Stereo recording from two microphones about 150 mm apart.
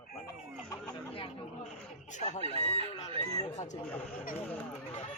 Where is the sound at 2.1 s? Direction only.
50° left (ahead or behind).